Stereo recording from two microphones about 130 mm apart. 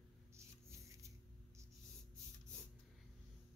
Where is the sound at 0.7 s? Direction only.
25° right (ahead or behind).